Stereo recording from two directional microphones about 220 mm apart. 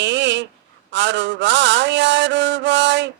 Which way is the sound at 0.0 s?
55° right (ahead or behind).